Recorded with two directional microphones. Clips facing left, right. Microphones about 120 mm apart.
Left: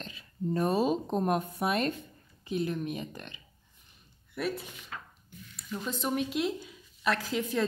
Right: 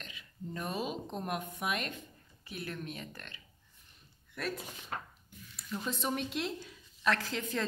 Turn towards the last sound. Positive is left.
turn(degrees=5)  # may be behind; listen again after turning